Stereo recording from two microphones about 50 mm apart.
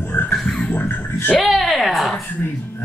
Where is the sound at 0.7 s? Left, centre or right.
Left.